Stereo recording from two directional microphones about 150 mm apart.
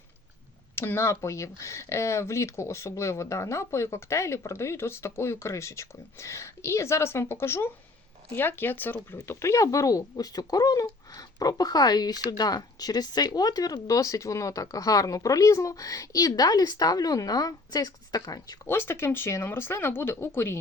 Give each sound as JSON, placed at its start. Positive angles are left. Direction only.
{"t": 0.8, "sound": "speech", "side_deg": 15}